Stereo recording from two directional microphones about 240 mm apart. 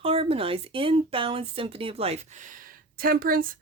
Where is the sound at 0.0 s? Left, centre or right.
Right.